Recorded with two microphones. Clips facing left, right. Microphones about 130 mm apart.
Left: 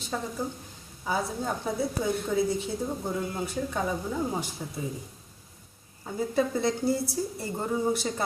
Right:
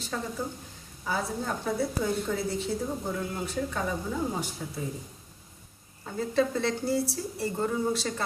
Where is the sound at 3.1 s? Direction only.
15° left (ahead or behind).